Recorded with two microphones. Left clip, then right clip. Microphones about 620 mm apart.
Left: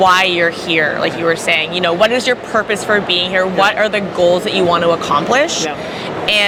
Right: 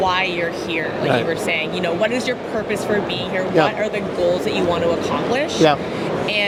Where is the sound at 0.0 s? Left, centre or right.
Left.